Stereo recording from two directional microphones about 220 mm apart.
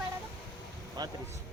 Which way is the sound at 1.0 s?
20° right (ahead or behind).